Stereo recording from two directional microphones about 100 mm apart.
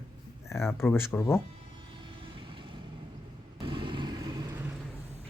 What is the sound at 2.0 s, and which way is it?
Vehicle, 55° right (ahead or behind).